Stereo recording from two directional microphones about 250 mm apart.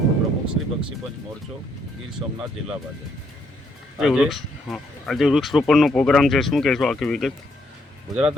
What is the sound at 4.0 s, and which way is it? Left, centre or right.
Speech, centre.